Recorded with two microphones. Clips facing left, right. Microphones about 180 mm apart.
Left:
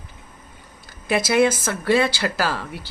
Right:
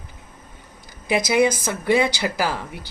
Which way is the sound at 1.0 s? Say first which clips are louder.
Even; 15° right (ahead or behind).